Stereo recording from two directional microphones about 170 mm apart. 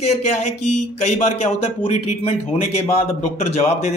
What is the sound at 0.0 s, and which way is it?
A man's voice, 40° left (ahead or behind).